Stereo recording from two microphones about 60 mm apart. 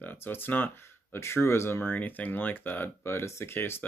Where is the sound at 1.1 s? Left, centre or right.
Left.